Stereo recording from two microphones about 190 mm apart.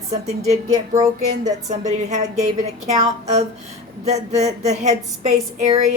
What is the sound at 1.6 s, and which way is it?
A woman's voice, 40° right (ahead or behind).